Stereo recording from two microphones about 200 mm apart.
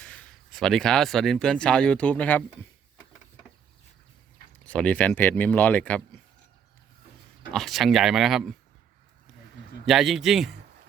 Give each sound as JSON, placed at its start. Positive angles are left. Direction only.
{"t": 0.0, "sound": "speech", "side_deg": 5}
{"t": 4.6, "sound": "speech", "side_deg": 5}
{"t": 7.5, "sound": "speech", "side_deg": 0}
{"t": 9.8, "sound": "speech", "side_deg": 0}